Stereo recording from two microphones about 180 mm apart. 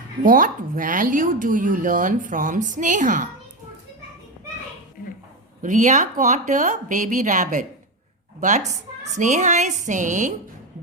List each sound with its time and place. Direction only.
0.2 s speech: 50° right (ahead or behind)
5.6 s a woman's voice: 45° right (ahead or behind)